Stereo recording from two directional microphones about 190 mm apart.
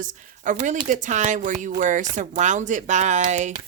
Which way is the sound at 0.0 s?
40° right (ahead or behind).